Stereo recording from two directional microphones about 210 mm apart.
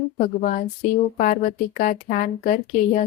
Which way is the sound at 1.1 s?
40° left (ahead or behind).